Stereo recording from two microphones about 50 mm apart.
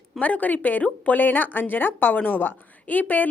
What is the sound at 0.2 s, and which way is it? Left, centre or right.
A woman's voice, left.